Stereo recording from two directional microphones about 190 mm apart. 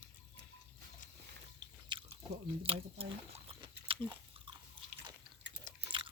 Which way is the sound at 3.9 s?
25° right (ahead or behind).